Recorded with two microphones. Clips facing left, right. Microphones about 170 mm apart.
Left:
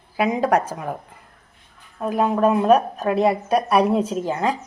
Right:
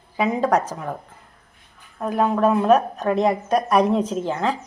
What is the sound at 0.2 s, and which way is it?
Speech, 15° left (ahead or behind).